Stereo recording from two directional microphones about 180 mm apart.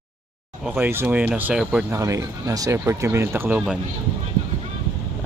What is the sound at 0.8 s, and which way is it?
Speech, 10° right (ahead or behind).